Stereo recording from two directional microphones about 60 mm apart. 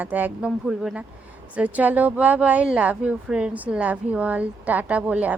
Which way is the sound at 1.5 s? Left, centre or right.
Right.